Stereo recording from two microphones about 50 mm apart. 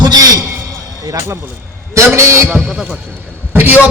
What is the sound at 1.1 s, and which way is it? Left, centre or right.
Speech, right.